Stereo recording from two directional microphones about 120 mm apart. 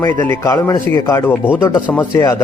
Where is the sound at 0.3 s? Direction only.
25° left (ahead or behind).